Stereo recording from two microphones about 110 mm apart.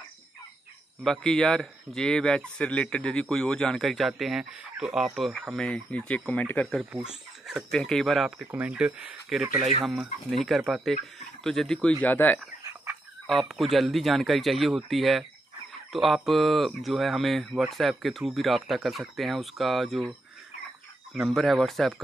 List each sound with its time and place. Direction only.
1.0 s speech: 5° left (ahead or behind)
5.7 s speech: 10° left (ahead or behind)
6.9 s speech: 5° right (ahead or behind)
7.7 s speech: 5° left (ahead or behind)
8.5 s speech: 10° right (ahead or behind); by 12.4 s 15° left (ahead or behind)
13.3 s speech: centre (ahead or behind)
21.1 s speech: centre (ahead or behind)